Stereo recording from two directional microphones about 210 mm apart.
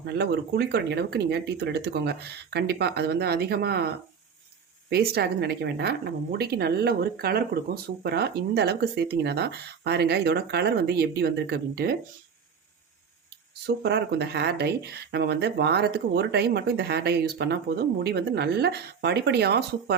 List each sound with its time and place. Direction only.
0.1 s speech: 50° right (ahead or behind)
13.7 s speech: 55° right (ahead or behind)